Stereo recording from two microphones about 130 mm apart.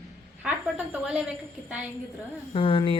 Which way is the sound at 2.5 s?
45° left (ahead or behind).